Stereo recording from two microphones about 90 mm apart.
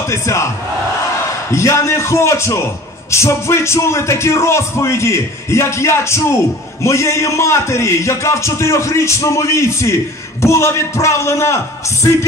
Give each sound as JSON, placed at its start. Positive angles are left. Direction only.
{"t": 0.1, "sound": "speech", "side_deg": 35}
{"t": 1.5, "sound": "speech", "side_deg": 35}